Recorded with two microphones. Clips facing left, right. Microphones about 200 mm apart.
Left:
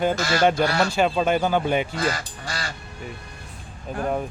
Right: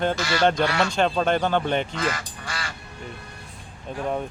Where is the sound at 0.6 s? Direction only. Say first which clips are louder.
Left 1 dB; 35° left (ahead or behind).